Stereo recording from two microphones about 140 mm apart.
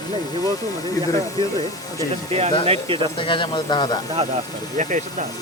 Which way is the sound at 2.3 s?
45° right (ahead or behind).